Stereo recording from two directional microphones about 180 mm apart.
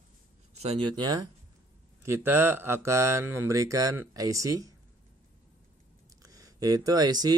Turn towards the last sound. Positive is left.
turn(degrees=-20)  # may be behind; listen again after turning